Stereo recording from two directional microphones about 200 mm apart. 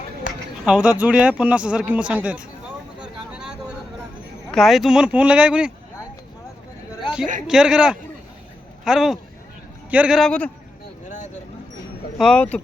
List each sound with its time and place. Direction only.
0.3 s a sound: 40° left (ahead or behind)
0.6 s speech: 5° right (ahead or behind)
4.5 s speech: centre (ahead or behind)
7.4 s speech: 5° right (ahead or behind)
12.1 s speech: 5° left (ahead or behind)